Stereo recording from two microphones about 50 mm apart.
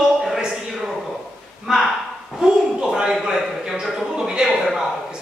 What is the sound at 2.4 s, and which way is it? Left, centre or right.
Speech, centre.